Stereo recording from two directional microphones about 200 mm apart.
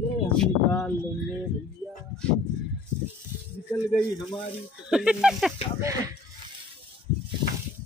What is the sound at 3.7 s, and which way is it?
Speech, 15° left (ahead or behind).